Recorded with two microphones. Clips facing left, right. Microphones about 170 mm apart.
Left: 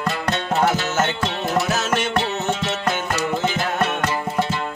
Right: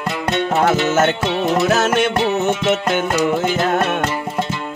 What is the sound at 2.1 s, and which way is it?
Music, 20° right (ahead or behind).